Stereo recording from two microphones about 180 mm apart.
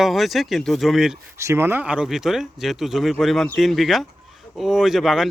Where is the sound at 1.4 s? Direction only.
15° right (ahead or behind).